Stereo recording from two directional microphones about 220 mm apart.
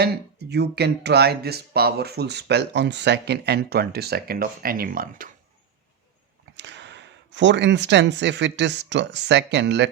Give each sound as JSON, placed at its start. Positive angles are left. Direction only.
{"t": 0.0, "sound": "speech", "side_deg": -50}
{"t": 6.6, "sound": "speech", "side_deg": -50}